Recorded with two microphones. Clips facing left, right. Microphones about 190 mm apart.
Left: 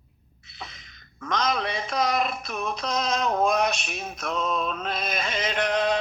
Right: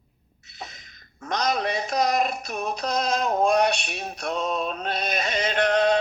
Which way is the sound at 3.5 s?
35° right (ahead or behind).